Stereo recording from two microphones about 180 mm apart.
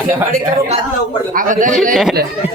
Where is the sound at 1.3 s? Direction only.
50° right (ahead or behind).